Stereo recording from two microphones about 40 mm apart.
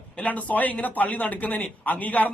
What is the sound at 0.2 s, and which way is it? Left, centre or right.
A man's voice, left.